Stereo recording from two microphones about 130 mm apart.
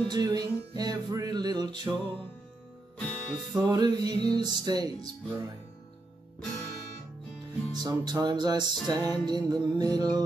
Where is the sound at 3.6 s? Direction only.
35° right (ahead or behind).